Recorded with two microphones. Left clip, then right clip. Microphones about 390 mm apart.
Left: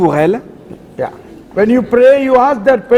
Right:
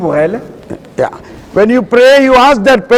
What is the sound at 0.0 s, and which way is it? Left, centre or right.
Speech, left.